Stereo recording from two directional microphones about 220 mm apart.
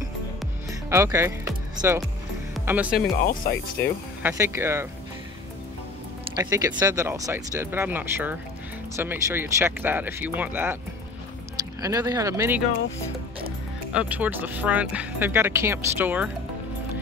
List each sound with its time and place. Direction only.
0.7 s music: 10° right (ahead or behind)
3.2 s speech: 40° left (ahead or behind)
4.2 s speech: 10° right (ahead or behind)
6.4 s speech: 15° right (ahead or behind)
11.8 s speech: 15° right (ahead or behind)
13.9 s speech: 5° right (ahead or behind)